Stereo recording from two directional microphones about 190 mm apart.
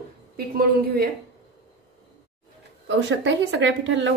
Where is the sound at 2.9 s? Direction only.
70° right (ahead or behind).